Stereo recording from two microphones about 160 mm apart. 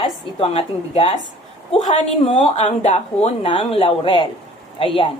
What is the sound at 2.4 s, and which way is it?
A woman's voice, 45° left (ahead or behind).